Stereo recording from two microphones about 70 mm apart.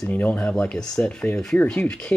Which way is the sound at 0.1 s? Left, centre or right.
Left.